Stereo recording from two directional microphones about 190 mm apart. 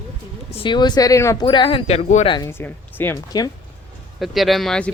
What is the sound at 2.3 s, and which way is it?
Speech, 15° left (ahead or behind).